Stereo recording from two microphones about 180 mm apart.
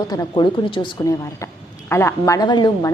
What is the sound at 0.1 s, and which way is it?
Speech, 20° left (ahead or behind).